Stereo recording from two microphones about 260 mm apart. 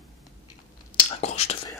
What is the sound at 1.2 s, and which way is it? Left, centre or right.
Whispering, left.